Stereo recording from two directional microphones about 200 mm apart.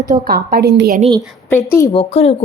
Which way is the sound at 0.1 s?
50° right (ahead or behind).